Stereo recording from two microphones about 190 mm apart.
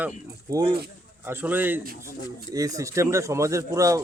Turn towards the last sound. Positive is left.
turn(degrees=-15)  # may be behind; listen again after turning